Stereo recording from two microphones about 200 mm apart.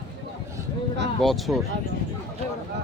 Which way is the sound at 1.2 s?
Centre (ahead or behind).